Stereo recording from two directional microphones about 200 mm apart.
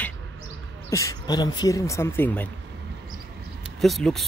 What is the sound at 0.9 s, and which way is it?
Speech, 15° left (ahead or behind).